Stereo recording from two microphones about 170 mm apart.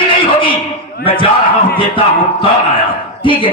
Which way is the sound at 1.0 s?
30° left (ahead or behind).